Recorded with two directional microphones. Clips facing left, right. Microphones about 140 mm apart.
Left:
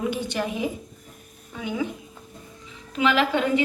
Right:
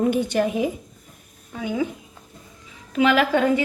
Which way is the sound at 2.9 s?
50° right (ahead or behind).